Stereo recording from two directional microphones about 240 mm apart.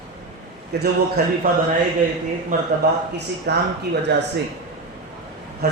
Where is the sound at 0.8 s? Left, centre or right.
Right.